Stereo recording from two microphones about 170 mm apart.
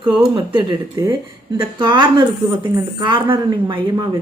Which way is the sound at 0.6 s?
25° right (ahead or behind).